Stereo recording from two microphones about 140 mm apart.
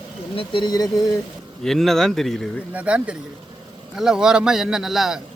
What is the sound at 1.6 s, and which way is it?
Speech, centre (ahead or behind).